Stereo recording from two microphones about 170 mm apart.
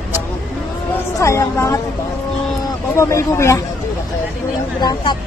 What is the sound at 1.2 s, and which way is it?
Speech, 15° left (ahead or behind).